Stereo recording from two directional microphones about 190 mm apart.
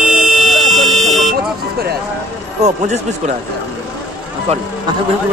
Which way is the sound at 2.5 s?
35° right (ahead or behind).